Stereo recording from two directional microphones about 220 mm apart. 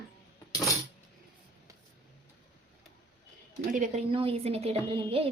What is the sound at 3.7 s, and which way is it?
A woman's voice, 30° right (ahead or behind).